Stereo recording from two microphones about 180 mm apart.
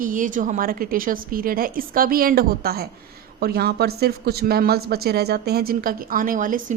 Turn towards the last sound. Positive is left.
turn(degrees=-50)  # may be behind; listen again after turning